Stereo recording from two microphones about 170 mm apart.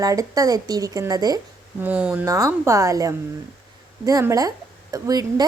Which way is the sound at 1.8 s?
10° right (ahead or behind).